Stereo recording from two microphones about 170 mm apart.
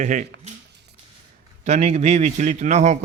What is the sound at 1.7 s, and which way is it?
Speech, 40° right (ahead or behind).